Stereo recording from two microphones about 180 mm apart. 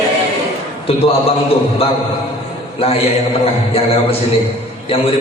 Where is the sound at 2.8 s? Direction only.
35° left (ahead or behind).